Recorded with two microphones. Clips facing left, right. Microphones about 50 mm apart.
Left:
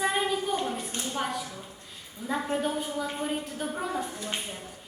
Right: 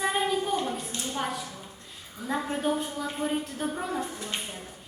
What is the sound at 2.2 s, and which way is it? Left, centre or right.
Speech, right.